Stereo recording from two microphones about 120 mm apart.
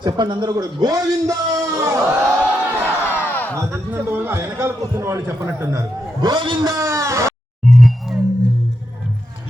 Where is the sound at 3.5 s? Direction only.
20° right (ahead or behind).